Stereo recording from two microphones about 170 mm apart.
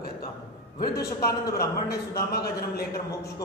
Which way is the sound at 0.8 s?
70° left (ahead or behind).